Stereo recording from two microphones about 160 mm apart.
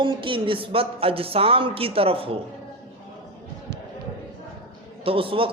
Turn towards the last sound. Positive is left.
turn(degrees=-35)  # may be behind; listen again after turning